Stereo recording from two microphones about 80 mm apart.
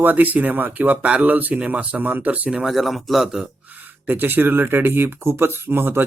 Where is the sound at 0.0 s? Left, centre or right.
Right; by 3.5 s centre.